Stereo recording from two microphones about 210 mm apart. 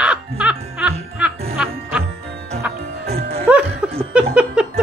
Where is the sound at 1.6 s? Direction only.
5° right (ahead or behind).